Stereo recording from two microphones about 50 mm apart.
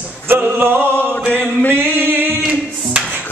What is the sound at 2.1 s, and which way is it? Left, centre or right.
Singing, right.